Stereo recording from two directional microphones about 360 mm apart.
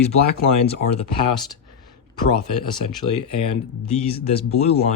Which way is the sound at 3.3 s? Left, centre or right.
Centre.